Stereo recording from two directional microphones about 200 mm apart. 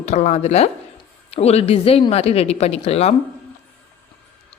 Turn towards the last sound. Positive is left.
turn(degrees=30)  # may be behind; listen again after turning